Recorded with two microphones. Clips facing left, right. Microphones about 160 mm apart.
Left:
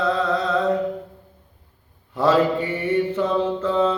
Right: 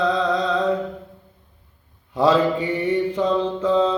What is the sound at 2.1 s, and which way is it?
Mantra, 15° right (ahead or behind).